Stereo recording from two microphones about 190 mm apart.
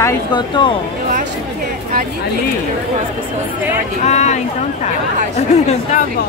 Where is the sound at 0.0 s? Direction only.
25° left (ahead or behind).